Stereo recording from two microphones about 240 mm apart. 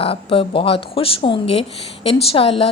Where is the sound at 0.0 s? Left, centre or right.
Left.